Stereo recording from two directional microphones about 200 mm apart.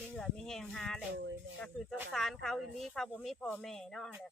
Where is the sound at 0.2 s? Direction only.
Centre (ahead or behind).